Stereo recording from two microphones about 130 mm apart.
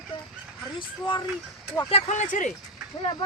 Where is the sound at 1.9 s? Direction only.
60° left (ahead or behind); by 2.5 s 80° left.